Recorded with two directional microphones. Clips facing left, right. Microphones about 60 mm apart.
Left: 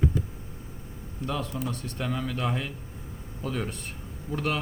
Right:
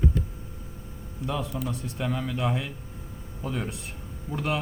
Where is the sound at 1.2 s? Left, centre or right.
Centre.